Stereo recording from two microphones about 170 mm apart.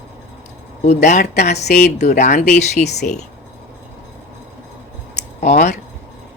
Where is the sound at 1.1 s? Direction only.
45° left (ahead or behind).